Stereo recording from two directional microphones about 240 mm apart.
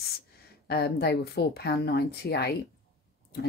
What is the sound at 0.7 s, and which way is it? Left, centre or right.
Speech, left.